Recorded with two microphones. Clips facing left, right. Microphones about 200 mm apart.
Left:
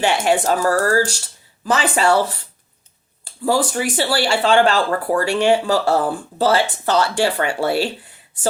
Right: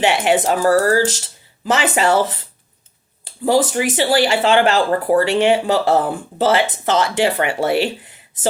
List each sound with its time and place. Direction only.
0.0 s speech: 15° right (ahead or behind)
3.4 s speech: 20° right (ahead or behind)